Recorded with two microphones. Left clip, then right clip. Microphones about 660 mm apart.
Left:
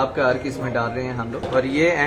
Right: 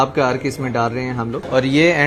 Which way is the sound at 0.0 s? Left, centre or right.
Right.